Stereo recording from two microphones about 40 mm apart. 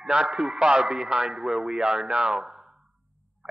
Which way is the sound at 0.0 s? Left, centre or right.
Centre.